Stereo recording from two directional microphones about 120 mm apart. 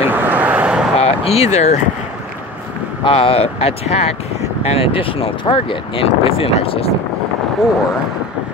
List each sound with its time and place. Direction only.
0.0 s vehicle: 15° right (ahead or behind)
0.9 s a sound: 60° left (ahead or behind)
3.0 s speech: 50° left (ahead or behind)
4.6 s speech: 50° left (ahead or behind)